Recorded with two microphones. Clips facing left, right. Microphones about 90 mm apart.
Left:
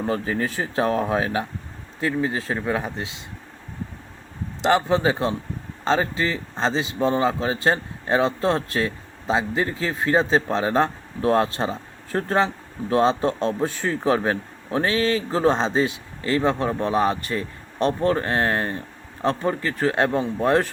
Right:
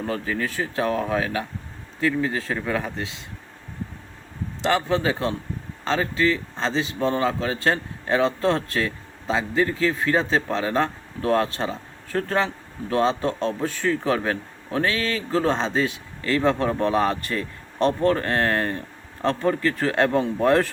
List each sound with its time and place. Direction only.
0.0 s speech: 30° left (ahead or behind)
4.6 s speech: 20° left (ahead or behind); by 17.9 s 5° left (ahead or behind)
18.0 s speech: 15° left (ahead or behind)